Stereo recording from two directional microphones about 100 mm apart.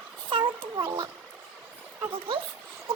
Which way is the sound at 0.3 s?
60° right (ahead or behind).